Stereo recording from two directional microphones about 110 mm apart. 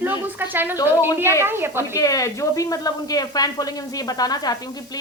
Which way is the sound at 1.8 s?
30° left (ahead or behind).